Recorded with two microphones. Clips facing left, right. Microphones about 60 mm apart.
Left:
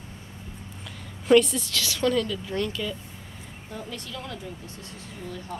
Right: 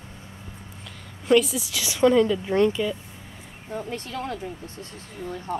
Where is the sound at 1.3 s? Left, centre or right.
Centre.